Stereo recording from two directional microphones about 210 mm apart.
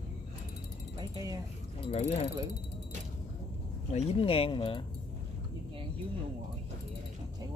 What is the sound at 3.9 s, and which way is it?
Speech, 30° left (ahead or behind).